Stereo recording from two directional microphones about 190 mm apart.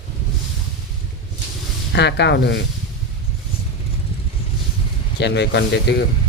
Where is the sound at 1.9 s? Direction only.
65° left (ahead or behind).